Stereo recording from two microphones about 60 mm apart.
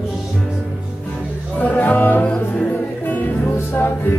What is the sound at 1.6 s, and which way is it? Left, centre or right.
Music, left.